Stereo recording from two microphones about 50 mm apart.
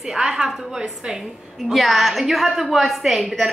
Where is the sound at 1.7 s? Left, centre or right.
Centre.